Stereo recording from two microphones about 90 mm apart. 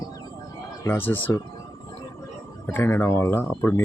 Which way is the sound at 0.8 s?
20° left (ahead or behind).